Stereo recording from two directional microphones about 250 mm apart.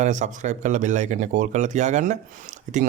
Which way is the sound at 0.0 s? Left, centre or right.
Right.